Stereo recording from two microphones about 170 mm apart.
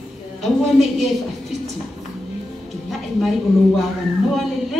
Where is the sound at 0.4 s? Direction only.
Centre (ahead or behind).